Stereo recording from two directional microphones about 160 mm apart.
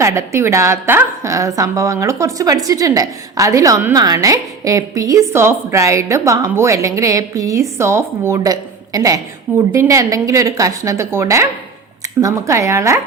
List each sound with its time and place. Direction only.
0.0 s a woman's voice: 20° right (ahead or behind)